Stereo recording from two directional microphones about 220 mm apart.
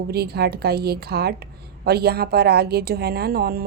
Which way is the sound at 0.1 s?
45° right (ahead or behind).